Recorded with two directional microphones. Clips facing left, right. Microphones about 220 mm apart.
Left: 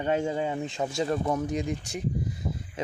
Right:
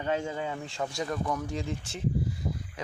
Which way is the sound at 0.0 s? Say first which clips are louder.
Left 4 dB; 25° left (ahead or behind).